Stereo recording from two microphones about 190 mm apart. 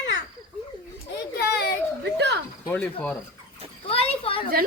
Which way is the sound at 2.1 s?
65° right (ahead or behind).